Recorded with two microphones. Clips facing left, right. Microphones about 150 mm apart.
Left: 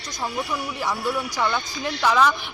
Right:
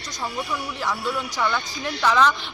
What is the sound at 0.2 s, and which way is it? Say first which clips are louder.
A man's voice: left 1 dB; 10° left (ahead or behind).